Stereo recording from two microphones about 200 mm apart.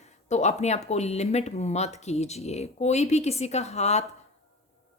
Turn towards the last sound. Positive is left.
turn(degrees=35)  # may be behind; listen again after turning